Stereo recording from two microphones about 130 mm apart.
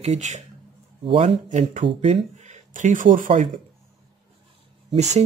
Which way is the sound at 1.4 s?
65° right (ahead or behind).